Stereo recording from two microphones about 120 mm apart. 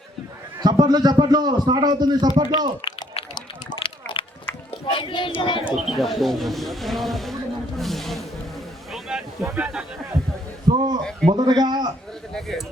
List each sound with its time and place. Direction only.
0.6 s a man's voice: 35° right (ahead or behind)
2.8 s a sound: 40° left (ahead or behind)
4.9 s speech: 45° left (ahead or behind)
5.7 s speech: centre (ahead or behind)
8.9 s a sound: 5° right (ahead or behind)
10.7 s a man's voice: 40° right (ahead or behind)
12.3 s speech: 5° left (ahead or behind)